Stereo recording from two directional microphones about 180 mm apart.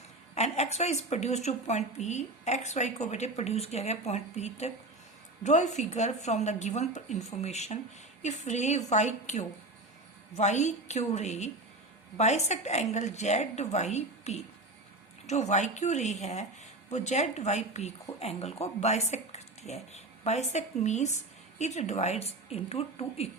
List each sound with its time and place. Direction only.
0.3 s a woman's voice: 35° left (ahead or behind)